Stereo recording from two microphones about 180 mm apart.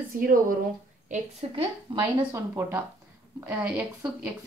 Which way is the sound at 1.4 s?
30° right (ahead or behind).